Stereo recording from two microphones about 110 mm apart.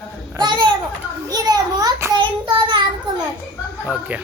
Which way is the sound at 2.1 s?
45° right (ahead or behind).